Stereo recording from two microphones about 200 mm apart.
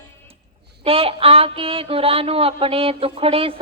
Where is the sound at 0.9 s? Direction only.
30° right (ahead or behind).